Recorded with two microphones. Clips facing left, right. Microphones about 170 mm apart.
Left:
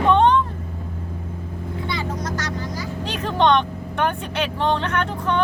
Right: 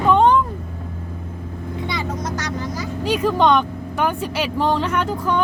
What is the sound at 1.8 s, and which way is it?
Vehicle, 20° right (ahead or behind).